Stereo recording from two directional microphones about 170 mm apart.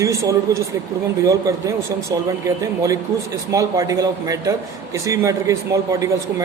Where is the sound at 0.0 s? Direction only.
20° right (ahead or behind).